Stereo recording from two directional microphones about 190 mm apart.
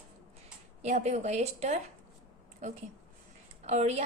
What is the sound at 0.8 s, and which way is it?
A woman's voice, 35° right (ahead or behind).